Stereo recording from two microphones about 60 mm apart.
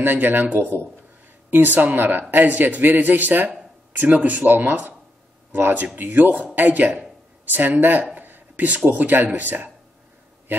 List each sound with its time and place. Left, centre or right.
0.0 s a man's voice: right